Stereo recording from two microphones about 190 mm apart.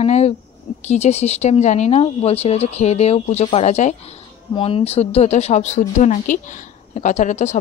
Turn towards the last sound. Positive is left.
turn(degrees=40)  # may be behind; listen again after turning